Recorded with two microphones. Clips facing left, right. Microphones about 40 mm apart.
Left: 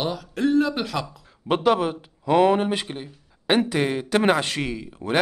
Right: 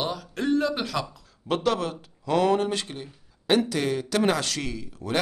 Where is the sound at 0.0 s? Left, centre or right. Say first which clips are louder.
Left 4 dB; centre.